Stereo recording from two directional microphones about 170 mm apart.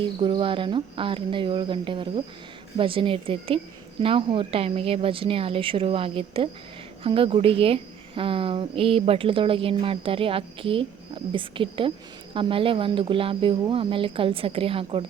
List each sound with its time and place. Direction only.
0.2 s a woman's voice: 30° right (ahead or behind)